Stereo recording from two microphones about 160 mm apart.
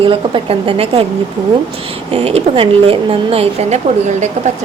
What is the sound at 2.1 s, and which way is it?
A woman's voice, 40° right (ahead or behind).